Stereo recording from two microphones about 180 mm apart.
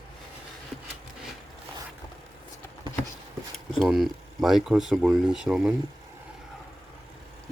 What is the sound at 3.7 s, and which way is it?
Speech, centre (ahead or behind).